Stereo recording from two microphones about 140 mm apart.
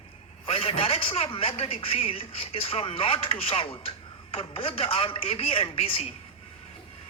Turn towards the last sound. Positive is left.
turn(degrees=45)  # may be behind; listen again after turning